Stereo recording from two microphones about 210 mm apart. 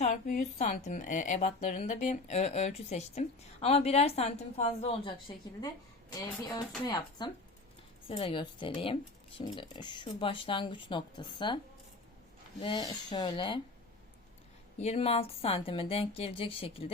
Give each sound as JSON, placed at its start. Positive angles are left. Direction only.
{"t": 0.0, "sound": "a woman's voice", "side_deg": 35}
{"t": 6.5, "sound": "speech", "side_deg": 20}
{"t": 14.8, "sound": "speech", "side_deg": 30}